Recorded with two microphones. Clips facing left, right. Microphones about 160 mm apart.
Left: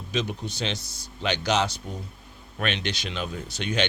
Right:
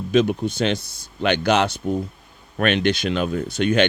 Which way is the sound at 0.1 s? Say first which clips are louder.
Right 11 dB; 55° right (ahead or behind).